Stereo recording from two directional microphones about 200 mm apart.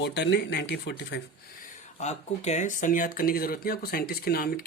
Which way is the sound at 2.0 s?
35° left (ahead or behind).